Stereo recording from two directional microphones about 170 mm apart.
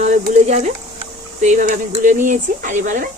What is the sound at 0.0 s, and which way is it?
Speech, 45° right (ahead or behind).